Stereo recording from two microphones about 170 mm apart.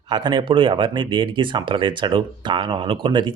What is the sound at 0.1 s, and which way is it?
Speech, 25° right (ahead or behind).